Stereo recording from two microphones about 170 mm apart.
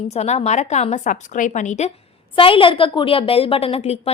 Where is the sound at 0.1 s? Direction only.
40° left (ahead or behind).